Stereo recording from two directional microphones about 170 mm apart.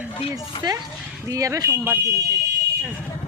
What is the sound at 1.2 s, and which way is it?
Speech, 20° right (ahead or behind).